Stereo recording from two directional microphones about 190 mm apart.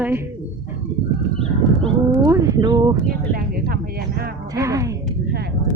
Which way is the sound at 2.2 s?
20° right (ahead or behind).